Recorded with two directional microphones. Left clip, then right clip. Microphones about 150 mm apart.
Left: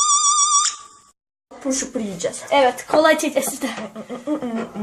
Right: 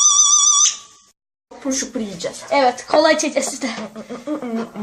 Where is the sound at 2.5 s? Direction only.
10° right (ahead or behind).